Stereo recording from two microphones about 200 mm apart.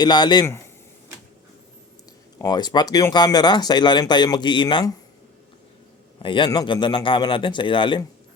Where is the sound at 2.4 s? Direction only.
20° left (ahead or behind).